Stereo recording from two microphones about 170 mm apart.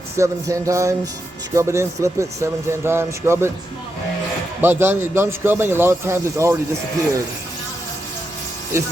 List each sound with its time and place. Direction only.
0.2 s a man's voice: 15° right (ahead or behind)
4.6 s a man's voice: 15° right (ahead or behind)
8.7 s a man's voice: 15° right (ahead or behind)